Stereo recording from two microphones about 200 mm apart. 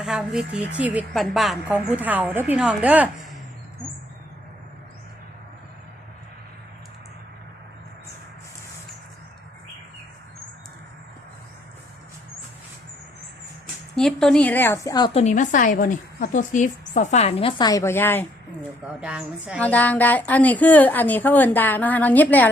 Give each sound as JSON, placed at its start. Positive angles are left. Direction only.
{"t": 0.0, "sound": "a woman's voice", "side_deg": 0}
{"t": 13.9, "sound": "a woman's voice", "side_deg": 5}
{"t": 15.2, "sound": "a woman's voice", "side_deg": 40}
{"t": 18.9, "sound": "a woman's voice", "side_deg": -5}
{"t": 19.5, "sound": "a woman's voice", "side_deg": 5}